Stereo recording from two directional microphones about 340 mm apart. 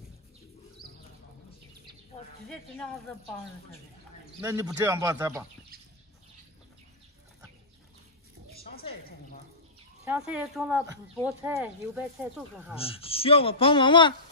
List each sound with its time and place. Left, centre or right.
2.4 s speech: centre
4.4 s speech: centre
8.7 s a sound: left
10.0 s speech: centre
12.7 s a man's voice: centre